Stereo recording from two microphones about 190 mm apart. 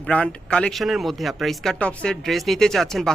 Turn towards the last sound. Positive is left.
turn(degrees=0)  # may be behind; listen again after turning